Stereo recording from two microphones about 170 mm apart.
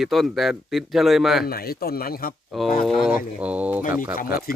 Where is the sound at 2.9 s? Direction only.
Centre (ahead or behind).